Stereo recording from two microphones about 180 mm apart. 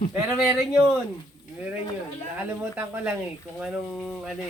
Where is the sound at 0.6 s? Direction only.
5° right (ahead or behind).